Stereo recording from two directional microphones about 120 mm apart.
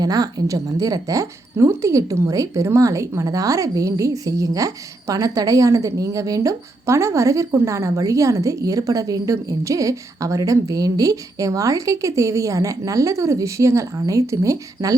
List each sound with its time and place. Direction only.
0.0 s a woman's voice: 30° right (ahead or behind)